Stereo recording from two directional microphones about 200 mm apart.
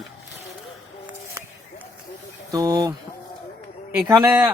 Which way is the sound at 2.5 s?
20° right (ahead or behind).